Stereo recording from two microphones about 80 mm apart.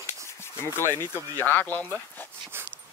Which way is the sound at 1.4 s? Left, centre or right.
Left.